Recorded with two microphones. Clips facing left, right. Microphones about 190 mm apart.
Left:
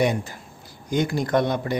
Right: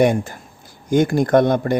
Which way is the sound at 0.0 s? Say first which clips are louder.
Right 6 dB; 50° right (ahead or behind).